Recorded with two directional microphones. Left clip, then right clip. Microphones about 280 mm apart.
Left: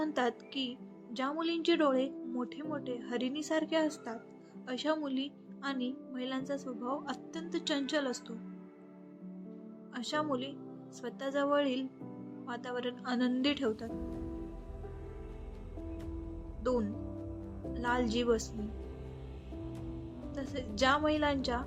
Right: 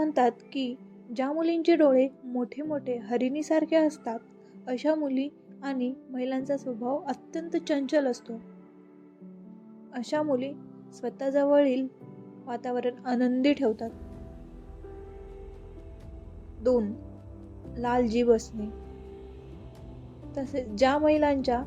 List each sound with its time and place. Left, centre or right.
0.0 s a woman's voice: centre
9.9 s a woman's voice: centre
16.6 s a woman's voice: centre
20.3 s a woman's voice: centre